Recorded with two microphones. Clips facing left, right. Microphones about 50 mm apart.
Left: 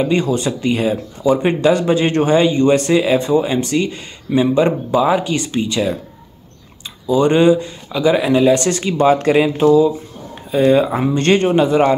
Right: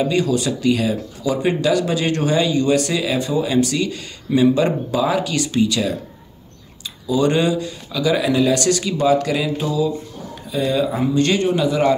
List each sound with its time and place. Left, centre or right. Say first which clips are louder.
0.0 s speech: left 2 dB; left
7.1 s speech: left 5 dB; left